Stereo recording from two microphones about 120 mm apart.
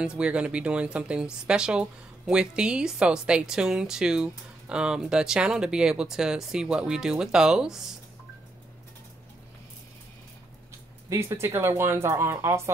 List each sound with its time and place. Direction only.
0.0 s speech: 10° right (ahead or behind)
11.1 s speech: 20° right (ahead or behind)